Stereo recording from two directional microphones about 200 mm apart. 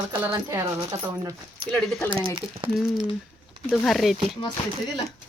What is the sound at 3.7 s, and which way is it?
Speech, centre (ahead or behind).